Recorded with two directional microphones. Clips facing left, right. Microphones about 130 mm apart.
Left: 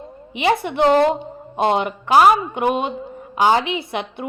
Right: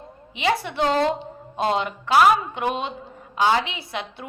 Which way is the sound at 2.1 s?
40° left (ahead or behind).